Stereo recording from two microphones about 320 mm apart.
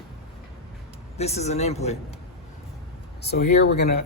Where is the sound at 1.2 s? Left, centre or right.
Centre.